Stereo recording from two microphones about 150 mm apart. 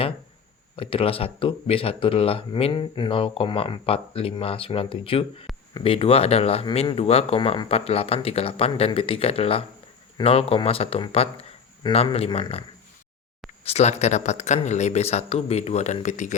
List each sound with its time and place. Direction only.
0.8 s speech: 40° left (ahead or behind)
13.7 s speech: 45° left (ahead or behind)